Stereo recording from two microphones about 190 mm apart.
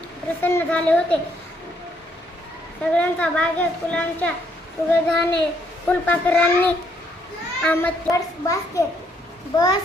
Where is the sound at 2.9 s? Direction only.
5° left (ahead or behind).